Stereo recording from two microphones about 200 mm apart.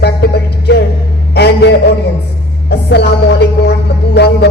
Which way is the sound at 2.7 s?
55° left (ahead or behind).